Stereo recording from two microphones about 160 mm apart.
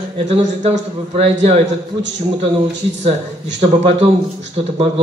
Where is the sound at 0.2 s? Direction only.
50° right (ahead or behind).